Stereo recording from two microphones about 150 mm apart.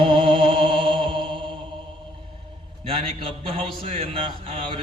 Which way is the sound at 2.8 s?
40° right (ahead or behind).